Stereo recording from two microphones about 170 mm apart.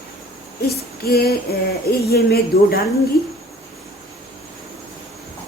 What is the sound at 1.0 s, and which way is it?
Female singing, 65° left (ahead or behind).